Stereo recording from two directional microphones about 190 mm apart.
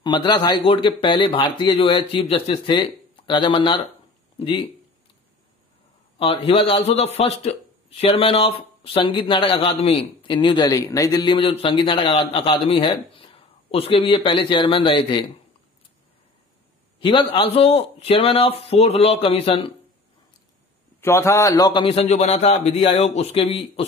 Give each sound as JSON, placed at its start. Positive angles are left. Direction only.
{"t": 0.0, "sound": "a man's voice", "side_deg": 25}
{"t": 6.1, "sound": "a man's voice", "side_deg": 30}
{"t": 17.0, "sound": "a man's voice", "side_deg": 25}
{"t": 21.0, "sound": "a man's voice", "side_deg": 15}